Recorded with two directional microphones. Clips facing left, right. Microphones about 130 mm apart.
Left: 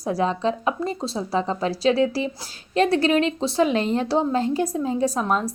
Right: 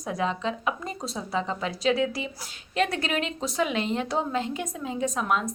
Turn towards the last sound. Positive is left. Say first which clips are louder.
# left 4 dB
turn(degrees=35)  # may be behind; listen again after turning